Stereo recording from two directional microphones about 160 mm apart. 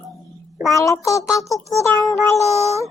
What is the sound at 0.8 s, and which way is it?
Speech, 20° left (ahead or behind).